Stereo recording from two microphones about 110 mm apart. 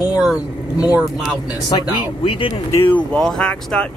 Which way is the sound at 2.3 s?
50° left (ahead or behind).